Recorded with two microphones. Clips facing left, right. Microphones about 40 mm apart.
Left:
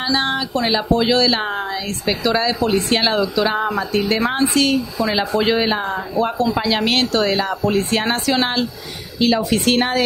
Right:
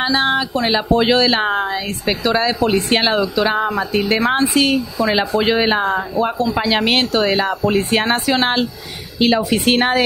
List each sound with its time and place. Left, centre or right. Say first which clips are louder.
0.1 s speech: right 3 dB; centre
0.7 s speech: right 2 dB; right
5.4 s speech: even; centre
5.7 s speech: right 4 dB; right
6.1 s speech: right 1 dB; centre
6.6 s speech: right 2 dB; right